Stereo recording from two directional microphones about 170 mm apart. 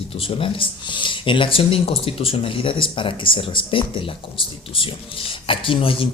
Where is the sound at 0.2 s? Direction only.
30° left (ahead or behind).